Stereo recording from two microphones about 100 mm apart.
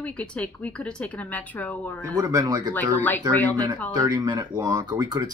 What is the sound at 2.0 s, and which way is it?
Speech, 35° right (ahead or behind).